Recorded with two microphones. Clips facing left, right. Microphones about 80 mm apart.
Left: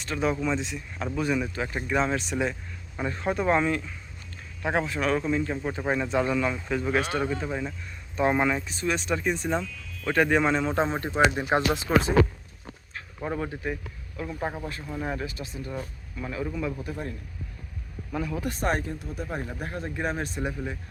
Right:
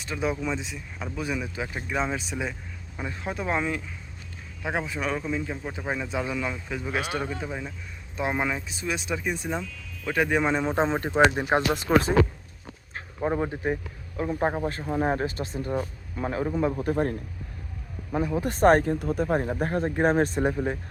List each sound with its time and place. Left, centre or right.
0.0 s speech: centre; by 11.2 s right
11.3 s speech: right
11.9 s speech: right
12.9 s speech: right
18.1 s speech: right